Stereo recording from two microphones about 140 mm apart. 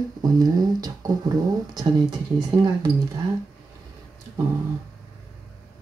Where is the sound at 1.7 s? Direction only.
30° right (ahead or behind).